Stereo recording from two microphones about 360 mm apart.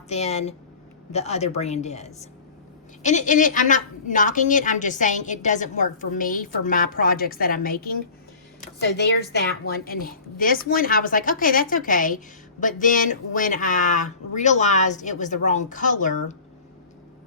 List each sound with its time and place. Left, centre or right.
0.1 s a woman's voice: centre